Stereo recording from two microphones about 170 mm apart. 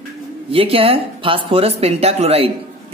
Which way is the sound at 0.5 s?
35° right (ahead or behind).